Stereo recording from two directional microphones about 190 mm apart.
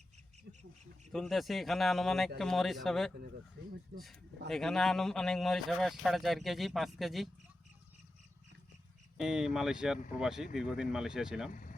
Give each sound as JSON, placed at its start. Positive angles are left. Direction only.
{"t": 0.5, "sound": "duck", "side_deg": -60}
{"t": 1.1, "sound": "speech", "side_deg": 0}
{"t": 9.1, "sound": "speech", "side_deg": -5}